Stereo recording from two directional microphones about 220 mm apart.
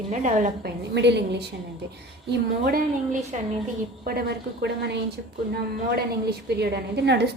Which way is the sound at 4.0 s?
45° right (ahead or behind).